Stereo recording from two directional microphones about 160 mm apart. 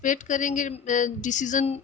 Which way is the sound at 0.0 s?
55° left (ahead or behind).